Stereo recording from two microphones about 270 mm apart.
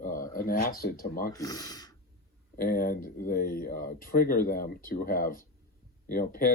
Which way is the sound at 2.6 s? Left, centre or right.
Left.